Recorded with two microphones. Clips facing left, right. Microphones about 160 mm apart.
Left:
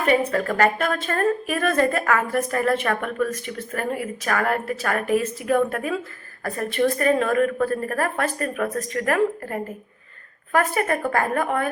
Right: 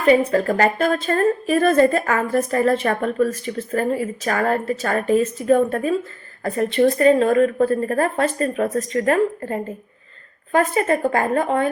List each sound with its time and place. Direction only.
0.1 s a woman's voice: 30° right (ahead or behind)
10.6 s speech: 25° right (ahead or behind)